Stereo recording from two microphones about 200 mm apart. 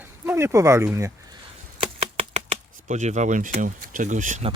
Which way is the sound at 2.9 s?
35° right (ahead or behind).